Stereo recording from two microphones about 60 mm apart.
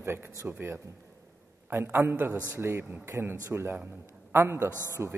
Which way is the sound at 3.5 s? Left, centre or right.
Centre.